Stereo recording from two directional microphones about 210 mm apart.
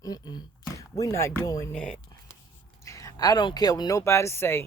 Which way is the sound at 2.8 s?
15° left (ahead or behind).